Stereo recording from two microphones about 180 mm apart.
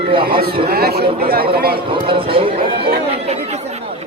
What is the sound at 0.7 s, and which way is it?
Speech, 60° right (ahead or behind).